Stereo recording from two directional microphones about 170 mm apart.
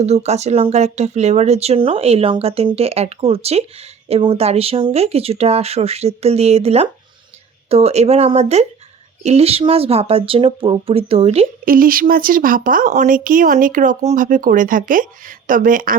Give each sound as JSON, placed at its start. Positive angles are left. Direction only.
{"t": 0.0, "sound": "speech", "side_deg": -40}
{"t": 11.6, "sound": "speech", "side_deg": -55}